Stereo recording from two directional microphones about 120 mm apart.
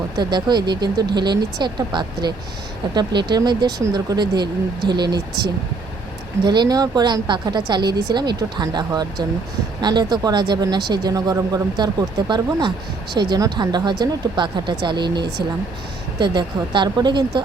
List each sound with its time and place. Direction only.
0.2 s speech: 40° right (ahead or behind)
6.4 s speech: 40° right (ahead or behind)